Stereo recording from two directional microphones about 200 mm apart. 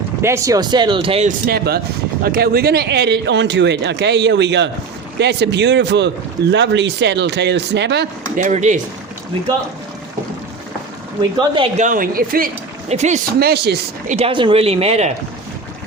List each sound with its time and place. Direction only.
0.2 s speech: 15° right (ahead or behind)
1.5 s speech: 50° right (ahead or behind)
8.4 s speech: 35° right (ahead or behind)
11.2 s speech: 25° right (ahead or behind)
11.8 s speech: 40° right (ahead or behind)
12.9 s speech: 35° right (ahead or behind)
13.4 s speech: 50° right (ahead or behind)
14.2 s speech: 25° right (ahead or behind)